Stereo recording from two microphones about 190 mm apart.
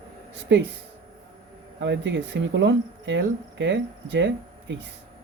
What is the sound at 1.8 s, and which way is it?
Speech, 70° right (ahead or behind).